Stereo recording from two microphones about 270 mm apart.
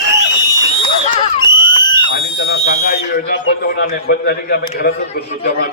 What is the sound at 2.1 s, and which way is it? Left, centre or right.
Speech, left.